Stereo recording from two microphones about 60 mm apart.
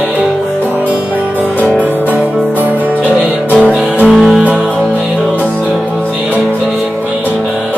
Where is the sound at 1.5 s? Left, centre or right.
Centre.